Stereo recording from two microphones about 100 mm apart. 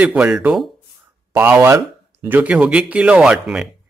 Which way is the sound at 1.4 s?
25° right (ahead or behind).